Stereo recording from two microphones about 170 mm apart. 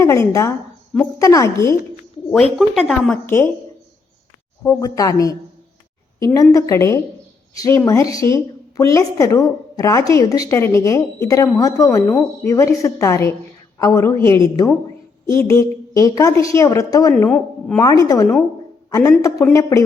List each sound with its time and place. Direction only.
0.0 s a woman's voice: 20° left (ahead or behind)
2.3 s a woman's voice: 5° left (ahead or behind)
4.6 s a woman's voice: 20° left (ahead or behind)
17.2 s speech: 5° left (ahead or behind)
17.7 s a woman's voice: 20° left (ahead or behind)